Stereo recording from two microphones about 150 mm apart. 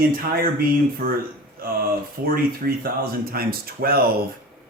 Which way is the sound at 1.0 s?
75° right (ahead or behind).